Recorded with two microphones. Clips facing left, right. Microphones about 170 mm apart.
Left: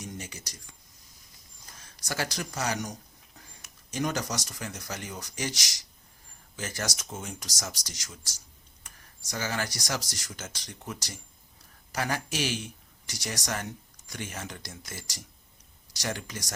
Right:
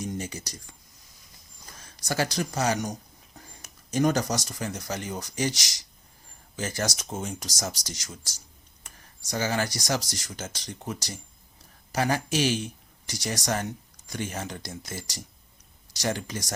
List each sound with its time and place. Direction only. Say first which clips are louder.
0.2 s speech: right 7 dB; 35° right (ahead or behind)
2.0 s speech: right 6 dB; 30° right (ahead or behind)
9.3 s speech: right 5 dB; 30° right (ahead or behind)